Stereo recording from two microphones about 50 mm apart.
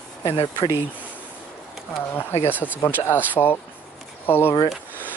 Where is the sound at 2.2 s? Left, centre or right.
Left.